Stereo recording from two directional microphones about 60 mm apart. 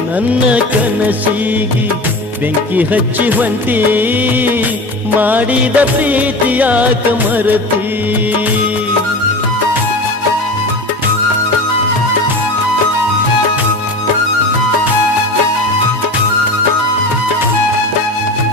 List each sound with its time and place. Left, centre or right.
2.7 s music of bollywood: right
5.2 s music of bollywood: right